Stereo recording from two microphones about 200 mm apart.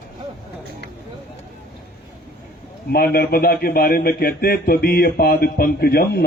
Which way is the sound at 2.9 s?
50° left (ahead or behind).